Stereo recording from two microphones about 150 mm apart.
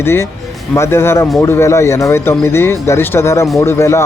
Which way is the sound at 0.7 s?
15° left (ahead or behind).